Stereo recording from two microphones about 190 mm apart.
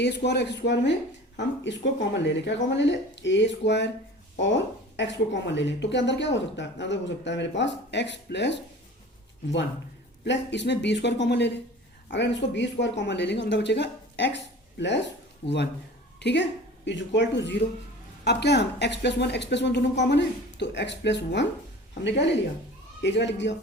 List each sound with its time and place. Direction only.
0.0 s speech: 65° left (ahead or behind)
10.2 s speech: 65° left (ahead or behind)
14.3 s a sound: 65° left (ahead or behind)
15.4 s speech: 65° left (ahead or behind)